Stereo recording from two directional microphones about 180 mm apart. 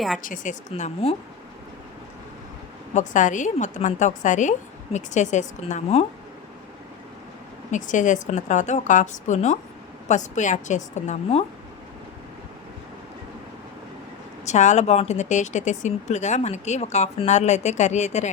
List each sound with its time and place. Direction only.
0.2 s a woman's voice: 50° left (ahead or behind)
0.7 s speech: 35° left (ahead or behind)
2.9 s a woman's voice: 45° left (ahead or behind)
7.7 s a woman's voice: 45° left (ahead or behind)
14.4 s speech: 40° left (ahead or behind)